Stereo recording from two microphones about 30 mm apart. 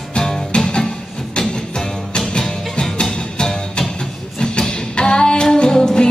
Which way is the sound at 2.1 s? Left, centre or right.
Left.